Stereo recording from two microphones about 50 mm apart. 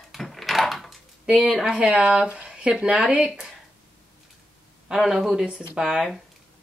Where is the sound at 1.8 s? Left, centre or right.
Right.